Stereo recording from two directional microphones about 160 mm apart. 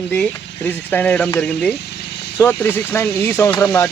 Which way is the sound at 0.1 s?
10° left (ahead or behind).